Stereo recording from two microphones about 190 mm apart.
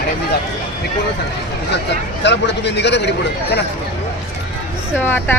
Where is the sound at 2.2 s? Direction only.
65° left (ahead or behind).